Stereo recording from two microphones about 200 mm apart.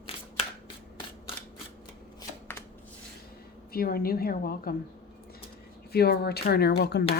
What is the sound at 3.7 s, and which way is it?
Speech, 50° left (ahead or behind).